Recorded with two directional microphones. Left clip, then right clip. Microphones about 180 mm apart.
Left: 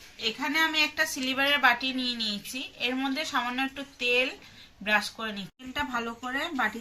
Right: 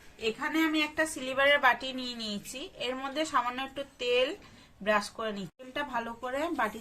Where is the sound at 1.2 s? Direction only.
30° right (ahead or behind).